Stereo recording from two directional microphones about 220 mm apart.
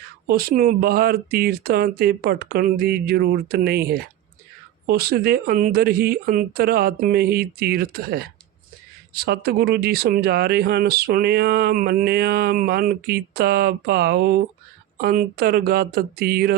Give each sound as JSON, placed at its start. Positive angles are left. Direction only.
{"t": 0.3, "sound": "speech", "side_deg": -45}